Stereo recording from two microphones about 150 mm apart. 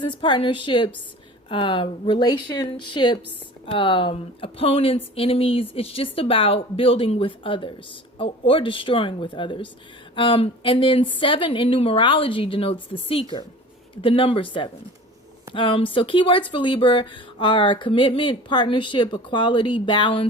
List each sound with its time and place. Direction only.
0.0 s speech: 30° left (ahead or behind)